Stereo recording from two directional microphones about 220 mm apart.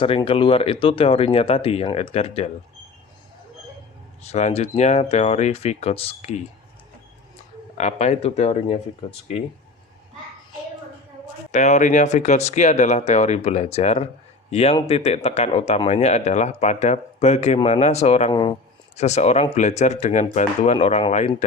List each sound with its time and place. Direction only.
0.0 s speech: 25° left (ahead or behind)
4.3 s speech: 30° left (ahead or behind)
7.8 s speech: 30° left (ahead or behind)
11.5 s speech: 30° left (ahead or behind)